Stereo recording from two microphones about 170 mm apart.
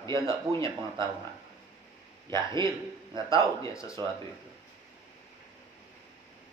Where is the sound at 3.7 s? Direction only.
20° left (ahead or behind).